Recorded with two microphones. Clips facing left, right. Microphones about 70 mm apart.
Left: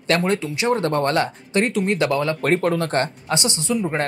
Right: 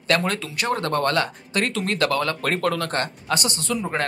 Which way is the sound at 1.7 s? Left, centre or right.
Centre.